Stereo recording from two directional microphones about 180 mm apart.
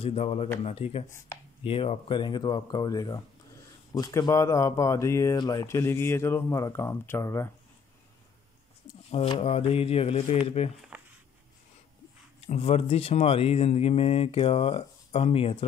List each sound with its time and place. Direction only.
0.0 s speech: 35° left (ahead or behind); by 7.5 s 15° left (ahead or behind)
9.1 s speech: 35° left (ahead or behind)
10.9 s a sound: 10° right (ahead or behind)
12.4 s speech: 35° left (ahead or behind)